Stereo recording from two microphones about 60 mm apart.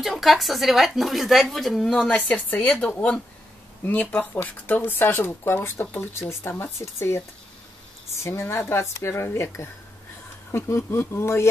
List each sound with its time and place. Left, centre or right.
0.0 s speech: centre
2.0 s speech: left